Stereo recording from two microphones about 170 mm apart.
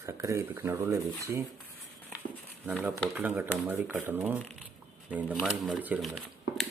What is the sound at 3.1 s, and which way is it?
Speech, 10° right (ahead or behind).